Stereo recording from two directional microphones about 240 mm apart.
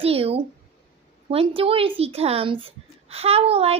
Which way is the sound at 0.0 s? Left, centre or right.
Right.